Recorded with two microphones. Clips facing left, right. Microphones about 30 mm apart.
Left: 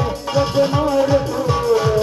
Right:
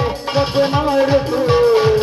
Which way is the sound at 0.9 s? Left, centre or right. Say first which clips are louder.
Right 2 dB; right.